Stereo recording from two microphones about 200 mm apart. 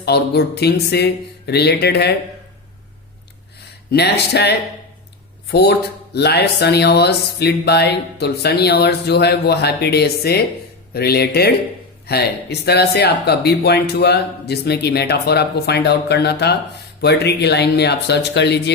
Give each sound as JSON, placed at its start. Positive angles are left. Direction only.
{"t": 0.0, "sound": "speech", "side_deg": 55}
{"t": 3.9, "sound": "a man's voice", "side_deg": 55}